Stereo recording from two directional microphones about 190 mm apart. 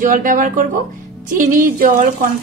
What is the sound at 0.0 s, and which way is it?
Speech, 45° right (ahead or behind).